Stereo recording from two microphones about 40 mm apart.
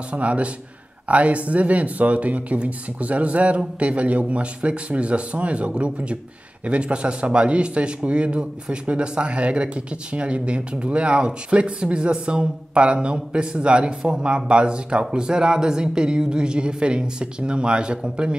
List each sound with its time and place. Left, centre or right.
0.1 s a man's voice: right